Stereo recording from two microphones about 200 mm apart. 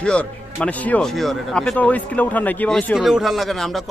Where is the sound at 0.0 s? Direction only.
5° left (ahead or behind).